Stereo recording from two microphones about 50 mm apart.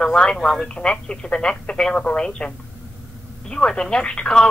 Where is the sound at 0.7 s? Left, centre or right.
Centre.